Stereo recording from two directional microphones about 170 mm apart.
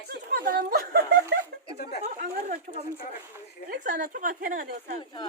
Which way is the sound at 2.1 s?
55° right (ahead or behind).